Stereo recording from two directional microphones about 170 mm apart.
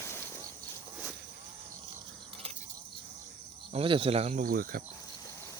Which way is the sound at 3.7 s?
30° right (ahead or behind).